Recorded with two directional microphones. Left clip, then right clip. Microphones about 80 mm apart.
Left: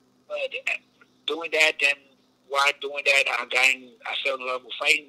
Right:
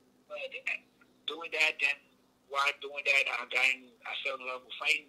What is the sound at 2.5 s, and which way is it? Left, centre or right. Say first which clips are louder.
A man's voice: left 8 dB; left.